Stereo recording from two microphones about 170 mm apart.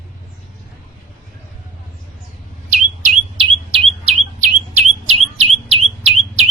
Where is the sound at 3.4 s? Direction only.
35° right (ahead or behind).